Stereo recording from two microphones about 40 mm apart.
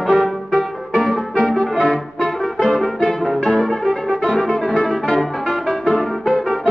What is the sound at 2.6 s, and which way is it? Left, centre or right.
Music, centre.